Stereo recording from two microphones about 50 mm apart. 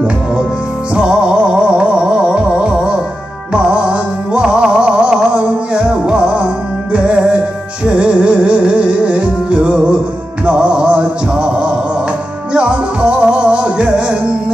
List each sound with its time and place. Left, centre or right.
0.9 s music: centre